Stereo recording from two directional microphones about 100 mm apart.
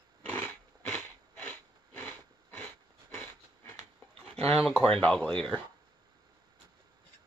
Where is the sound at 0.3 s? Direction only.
20° left (ahead or behind).